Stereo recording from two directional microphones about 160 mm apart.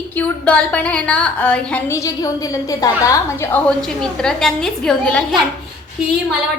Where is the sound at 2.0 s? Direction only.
20° left (ahead or behind).